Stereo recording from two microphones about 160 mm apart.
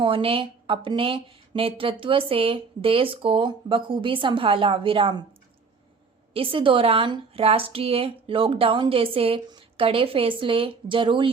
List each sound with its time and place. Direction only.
0.0 s speech: 35° right (ahead or behind)
6.3 s speech: 35° right (ahead or behind)